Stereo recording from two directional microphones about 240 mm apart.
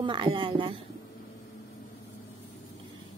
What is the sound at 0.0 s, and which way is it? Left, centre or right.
Speech, right.